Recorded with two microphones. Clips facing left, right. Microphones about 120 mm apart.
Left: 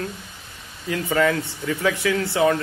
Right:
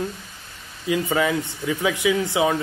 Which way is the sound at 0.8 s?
15° right (ahead or behind).